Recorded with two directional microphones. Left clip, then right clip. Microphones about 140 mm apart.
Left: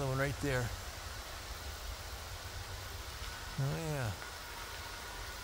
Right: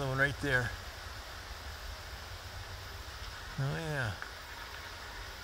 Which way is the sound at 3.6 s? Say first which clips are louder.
Right 4 dB; 5° right (ahead or behind).